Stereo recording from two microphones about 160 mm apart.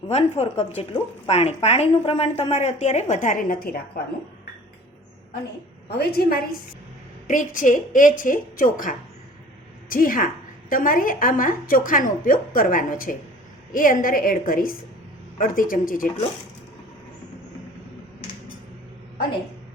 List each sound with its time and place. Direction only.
0.1 s a woman's voice: 40° left (ahead or behind); by 4.0 s 65° left (ahead or behind)
6.0 s a woman's voice: 75° left (ahead or behind)
7.3 s a woman's voice: 55° left (ahead or behind)